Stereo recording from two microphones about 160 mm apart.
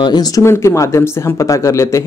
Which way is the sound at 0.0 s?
25° left (ahead or behind).